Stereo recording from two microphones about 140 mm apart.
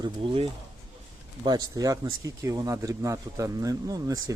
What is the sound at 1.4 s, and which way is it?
Speech, 25° right (ahead or behind).